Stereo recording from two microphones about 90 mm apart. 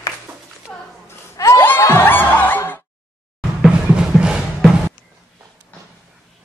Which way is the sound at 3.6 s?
10° right (ahead or behind).